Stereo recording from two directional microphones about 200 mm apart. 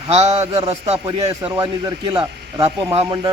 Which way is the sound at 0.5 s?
20° right (ahead or behind).